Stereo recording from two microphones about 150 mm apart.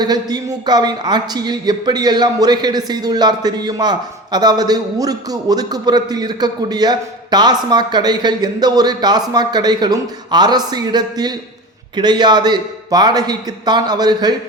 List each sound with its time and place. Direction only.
0.0 s a woman's voice: 25° right (ahead or behind)